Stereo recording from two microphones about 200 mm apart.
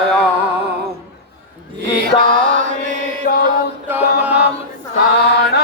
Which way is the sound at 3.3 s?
40° left (ahead or behind).